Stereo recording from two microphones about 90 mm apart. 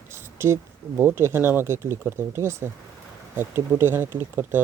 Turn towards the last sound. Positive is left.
turn(degrees=-25)  # may be behind; listen again after turning